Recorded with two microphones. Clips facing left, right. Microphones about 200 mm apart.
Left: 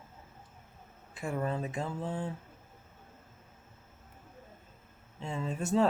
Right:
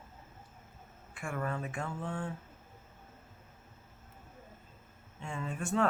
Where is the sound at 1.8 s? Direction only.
35° left (ahead or behind).